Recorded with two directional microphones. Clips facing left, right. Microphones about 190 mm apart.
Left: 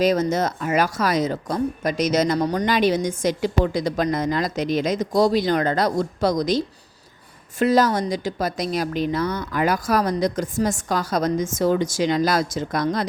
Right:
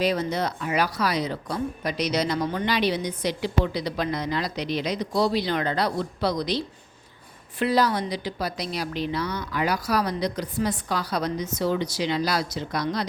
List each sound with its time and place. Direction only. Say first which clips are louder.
0.0 s speech: left 5 dB; 45° left (ahead or behind)
7.6 s speech: left 4 dB; 45° left (ahead or behind)